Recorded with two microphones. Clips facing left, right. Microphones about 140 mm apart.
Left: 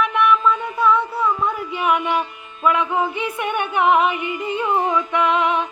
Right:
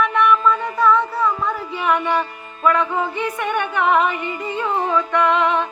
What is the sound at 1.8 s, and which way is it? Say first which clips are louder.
Music: even; 10° left (ahead or behind).